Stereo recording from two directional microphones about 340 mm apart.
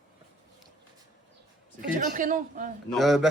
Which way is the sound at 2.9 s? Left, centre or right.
Centre.